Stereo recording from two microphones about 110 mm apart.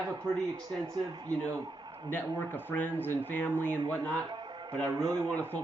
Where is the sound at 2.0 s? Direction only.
20° left (ahead or behind).